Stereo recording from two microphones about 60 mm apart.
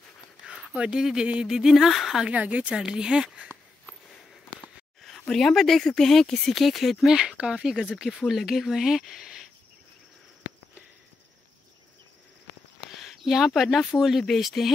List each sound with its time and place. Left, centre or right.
0.7 s speech: centre
2.3 s speech: right
2.7 s speech: centre
5.3 s speech: centre
7.2 s speech: centre
13.0 s a sound: centre
13.6 s speech: centre